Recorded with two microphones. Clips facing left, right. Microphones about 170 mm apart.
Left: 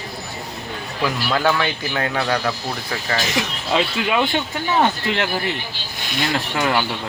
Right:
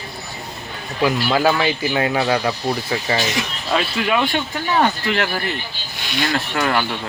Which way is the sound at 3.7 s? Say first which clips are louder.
Even; 20° left (ahead or behind).